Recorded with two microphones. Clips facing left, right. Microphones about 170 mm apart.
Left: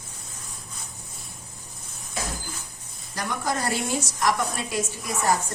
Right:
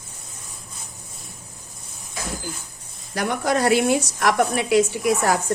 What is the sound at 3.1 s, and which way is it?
A woman's voice, 65° right (ahead or behind).